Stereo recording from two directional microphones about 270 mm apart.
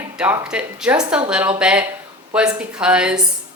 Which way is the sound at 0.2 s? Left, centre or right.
Centre.